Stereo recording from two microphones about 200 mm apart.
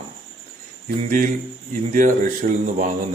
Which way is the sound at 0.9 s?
40° right (ahead or behind).